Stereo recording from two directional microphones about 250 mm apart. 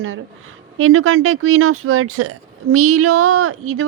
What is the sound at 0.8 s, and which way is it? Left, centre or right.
Speech, right.